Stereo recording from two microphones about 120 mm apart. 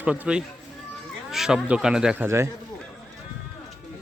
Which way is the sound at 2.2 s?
20° right (ahead or behind).